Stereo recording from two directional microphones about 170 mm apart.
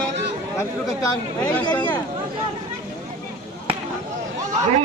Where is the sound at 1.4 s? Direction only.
10° left (ahead or behind).